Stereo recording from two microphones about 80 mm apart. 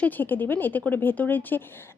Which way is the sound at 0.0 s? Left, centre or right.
Left.